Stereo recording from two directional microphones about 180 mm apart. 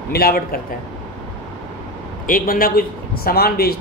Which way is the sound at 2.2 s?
50° left (ahead or behind).